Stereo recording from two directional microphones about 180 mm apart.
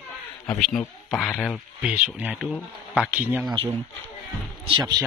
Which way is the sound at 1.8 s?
5° right (ahead or behind).